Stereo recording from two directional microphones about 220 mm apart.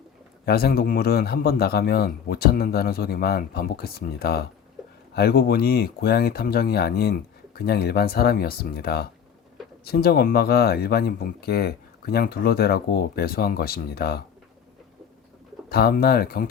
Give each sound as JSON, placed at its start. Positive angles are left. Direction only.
{"t": 0.4, "sound": "speech", "side_deg": 45}
{"t": 15.7, "sound": "speech", "side_deg": 45}